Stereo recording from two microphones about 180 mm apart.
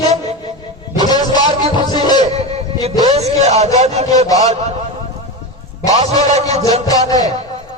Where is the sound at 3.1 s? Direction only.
35° right (ahead or behind).